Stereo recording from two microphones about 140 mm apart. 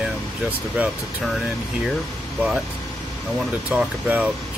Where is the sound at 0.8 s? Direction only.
10° right (ahead or behind).